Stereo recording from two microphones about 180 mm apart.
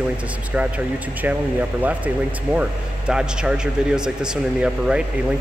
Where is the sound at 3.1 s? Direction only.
5° right (ahead or behind).